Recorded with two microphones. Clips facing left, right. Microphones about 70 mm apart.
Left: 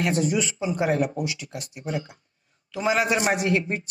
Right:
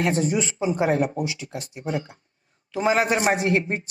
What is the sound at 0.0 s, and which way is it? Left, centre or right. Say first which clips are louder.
A man's voice: right 1 dB; right.